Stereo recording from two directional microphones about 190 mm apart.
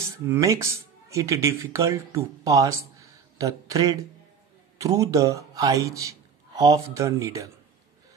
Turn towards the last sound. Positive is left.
turn(degrees=-15)  # may be behind; listen again after turning